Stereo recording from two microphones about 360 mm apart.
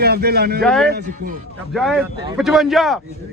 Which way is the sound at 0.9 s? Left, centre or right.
Right.